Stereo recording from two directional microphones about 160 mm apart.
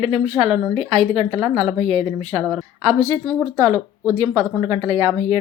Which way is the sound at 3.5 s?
25° right (ahead or behind).